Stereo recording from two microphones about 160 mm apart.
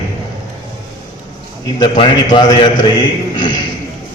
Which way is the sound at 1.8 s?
30° left (ahead or behind).